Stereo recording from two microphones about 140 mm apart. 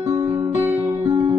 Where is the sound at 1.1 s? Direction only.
35° right (ahead or behind).